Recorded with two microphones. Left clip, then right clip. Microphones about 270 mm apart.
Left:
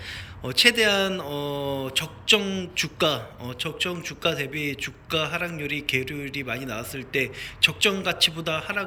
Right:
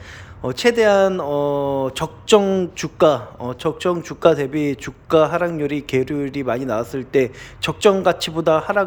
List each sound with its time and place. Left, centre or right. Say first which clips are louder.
0.4 s speech: right 4 dB; centre